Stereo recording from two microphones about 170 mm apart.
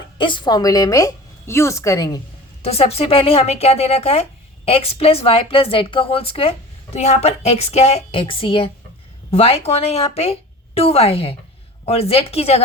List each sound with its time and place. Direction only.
0.2 s a woman's voice: 30° left (ahead or behind)
2.6 s speech: 35° left (ahead or behind)